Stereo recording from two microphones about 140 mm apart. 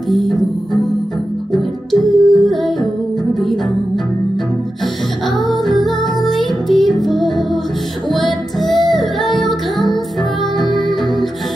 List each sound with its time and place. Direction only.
0.1 s music: centre (ahead or behind)
1.5 s music: centre (ahead or behind)
5.5 s music: centre (ahead or behind)